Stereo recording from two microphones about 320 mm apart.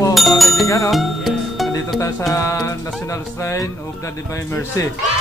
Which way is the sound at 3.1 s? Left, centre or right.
Centre.